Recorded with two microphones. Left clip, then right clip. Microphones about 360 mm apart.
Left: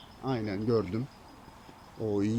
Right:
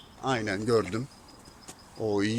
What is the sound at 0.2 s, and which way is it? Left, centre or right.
Speech, right.